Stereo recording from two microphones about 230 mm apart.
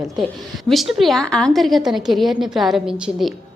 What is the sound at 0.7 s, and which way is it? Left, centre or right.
A woman's voice, centre.